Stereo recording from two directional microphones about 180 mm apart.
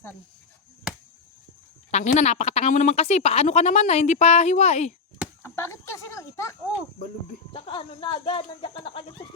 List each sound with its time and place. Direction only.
1.9 s speech: 40° left (ahead or behind)
5.4 s a sound: 15° left (ahead or behind)
7.5 s speech: 30° left (ahead or behind)